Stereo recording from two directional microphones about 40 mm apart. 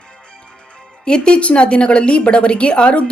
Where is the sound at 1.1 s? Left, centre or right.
Left.